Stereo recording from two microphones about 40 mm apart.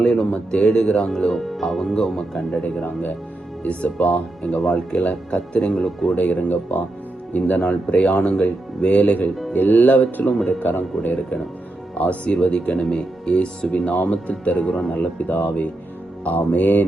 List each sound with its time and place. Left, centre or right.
0.0 s speech: centre
1.8 s speech: centre
3.6 s speech: left
5.7 s speech: centre
6.1 s speech: left
7.6 s speech: left
9.5 s speech: left
10.4 s speech: left
11.9 s speech: left
14.9 s speech: left
16.2 s speech: left